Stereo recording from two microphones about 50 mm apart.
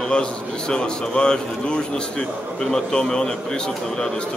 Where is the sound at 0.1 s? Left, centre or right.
Centre.